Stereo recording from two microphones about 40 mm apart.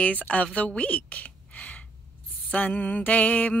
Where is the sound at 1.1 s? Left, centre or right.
Left.